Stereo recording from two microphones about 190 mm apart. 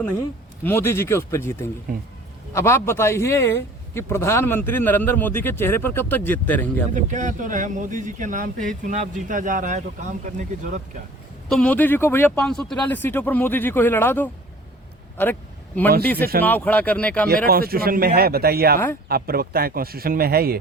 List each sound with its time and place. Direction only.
0.6 s a man's voice: 10° left (ahead or behind)
6.9 s speech: 40° right (ahead or behind)
11.4 s a man's voice: 5° left (ahead or behind)
16.1 s speech: 55° right (ahead or behind)
16.4 s a man's voice: 10° left (ahead or behind)
17.2 s speech: 55° right (ahead or behind)